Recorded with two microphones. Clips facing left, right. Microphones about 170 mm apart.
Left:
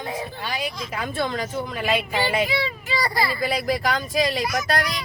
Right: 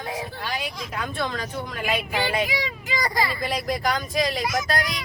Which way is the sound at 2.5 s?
15° right (ahead or behind).